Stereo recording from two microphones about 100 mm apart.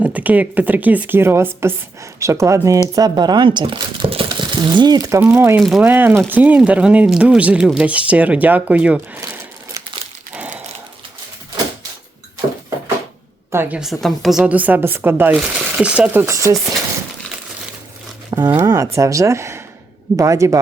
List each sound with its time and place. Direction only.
0.0 s speech: 15° right (ahead or behind); by 5.2 s 35° right (ahead or behind)
5.2 s speech: 20° right (ahead or behind)
5.5 s a woman's voice: centre (ahead or behind)
5.8 s speech: 20° right (ahead or behind)
13.5 s a woman's voice: 25° right (ahead or behind)
13.7 s a woman's voice: centre (ahead or behind)
14.5 s speech: 15° right (ahead or behind)
15.4 s speech: 10° right (ahead or behind)
16.2 s speech: 30° right (ahead or behind)
18.3 s speech: 40° right (ahead or behind)